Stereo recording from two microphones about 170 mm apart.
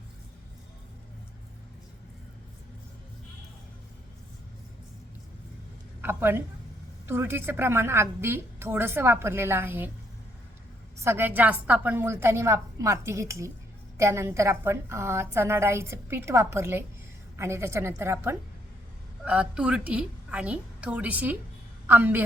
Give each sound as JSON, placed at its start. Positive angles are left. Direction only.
{"t": 6.0, "sound": "a woman's voice", "side_deg": -15}
{"t": 11.0, "sound": "a woman's voice", "side_deg": -15}